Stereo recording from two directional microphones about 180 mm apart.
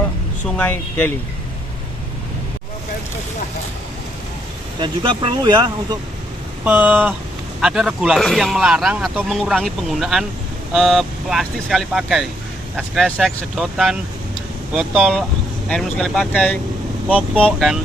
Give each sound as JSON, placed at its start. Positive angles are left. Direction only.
{"t": 0.4, "sound": "speech", "side_deg": 5}
{"t": 4.8, "sound": "speech", "side_deg": -25}
{"t": 6.7, "sound": "speech", "side_deg": -10}
{"t": 17.1, "sound": "speech", "side_deg": -5}